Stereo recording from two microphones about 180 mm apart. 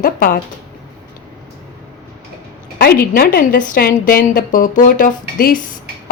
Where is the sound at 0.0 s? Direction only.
55° left (ahead or behind).